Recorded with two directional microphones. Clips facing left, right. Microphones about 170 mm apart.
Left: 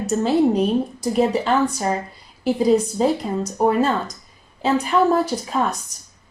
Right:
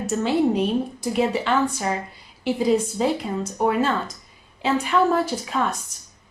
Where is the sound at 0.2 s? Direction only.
40° left (ahead or behind).